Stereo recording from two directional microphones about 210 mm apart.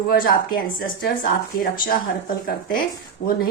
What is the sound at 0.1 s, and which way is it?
Speech, 45° left (ahead or behind).